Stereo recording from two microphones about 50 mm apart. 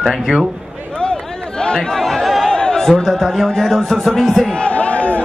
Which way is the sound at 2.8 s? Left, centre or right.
Centre.